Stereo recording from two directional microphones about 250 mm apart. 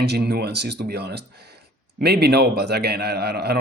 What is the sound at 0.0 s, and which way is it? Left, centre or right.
Speech, right.